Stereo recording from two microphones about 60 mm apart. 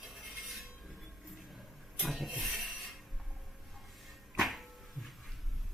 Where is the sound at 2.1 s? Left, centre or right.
Centre.